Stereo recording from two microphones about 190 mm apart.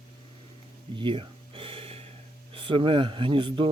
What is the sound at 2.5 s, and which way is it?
Speech, 25° right (ahead or behind).